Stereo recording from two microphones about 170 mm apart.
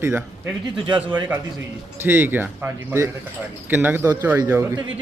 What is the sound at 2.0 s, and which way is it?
Speech, 10° right (ahead or behind).